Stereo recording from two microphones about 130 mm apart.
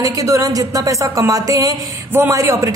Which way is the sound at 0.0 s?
25° right (ahead or behind).